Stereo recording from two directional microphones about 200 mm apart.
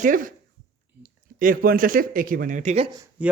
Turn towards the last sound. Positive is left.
turn(degrees=-5)  # may be behind; listen again after turning